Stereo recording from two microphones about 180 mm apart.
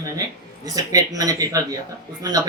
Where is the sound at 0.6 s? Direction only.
20° right (ahead or behind).